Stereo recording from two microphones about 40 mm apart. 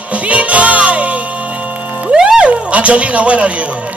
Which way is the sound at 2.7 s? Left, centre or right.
Right.